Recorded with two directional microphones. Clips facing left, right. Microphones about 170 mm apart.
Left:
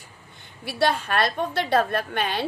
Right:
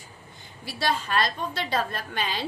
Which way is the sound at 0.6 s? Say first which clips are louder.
Left 5 dB; 60° left (ahead or behind).